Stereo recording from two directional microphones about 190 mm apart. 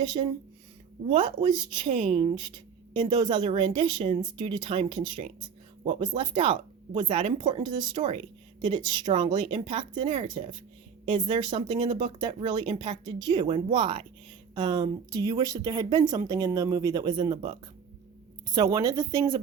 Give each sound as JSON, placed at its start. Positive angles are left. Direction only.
{"t": 0.0, "sound": "speech", "side_deg": -25}